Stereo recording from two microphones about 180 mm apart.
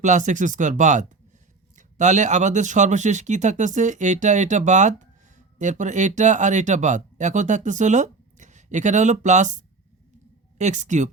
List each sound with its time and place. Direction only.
0.0 s speech: 45° right (ahead or behind)